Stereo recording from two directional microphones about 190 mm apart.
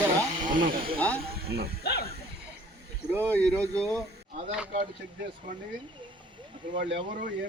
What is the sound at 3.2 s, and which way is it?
Speech, 10° left (ahead or behind).